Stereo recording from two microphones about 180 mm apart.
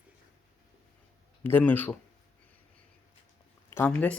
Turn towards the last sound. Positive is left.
turn(degrees=10)  # may be behind; listen again after turning